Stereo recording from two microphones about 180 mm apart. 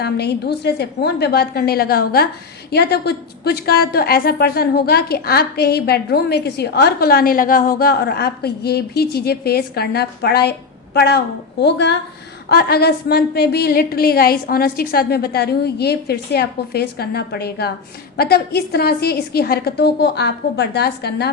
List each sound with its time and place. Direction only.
0.0 s a woman's voice: 65° left (ahead or behind)
12.5 s a woman's voice: 60° left (ahead or behind)